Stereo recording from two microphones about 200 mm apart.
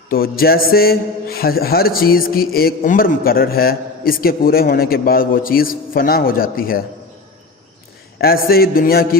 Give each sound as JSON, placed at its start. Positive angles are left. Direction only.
{"t": 0.1, "sound": "a man's voice", "side_deg": 50}
{"t": 8.2, "sound": "a man's voice", "side_deg": 50}